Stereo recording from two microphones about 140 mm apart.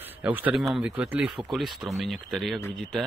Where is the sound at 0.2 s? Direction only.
10° right (ahead or behind).